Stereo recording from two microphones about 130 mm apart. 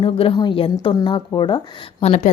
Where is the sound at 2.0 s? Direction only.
60° left (ahead or behind).